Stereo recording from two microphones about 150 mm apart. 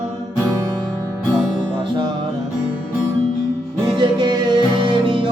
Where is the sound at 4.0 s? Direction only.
30° right (ahead or behind).